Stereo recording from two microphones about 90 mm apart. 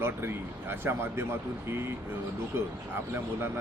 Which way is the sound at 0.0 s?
25° right (ahead or behind).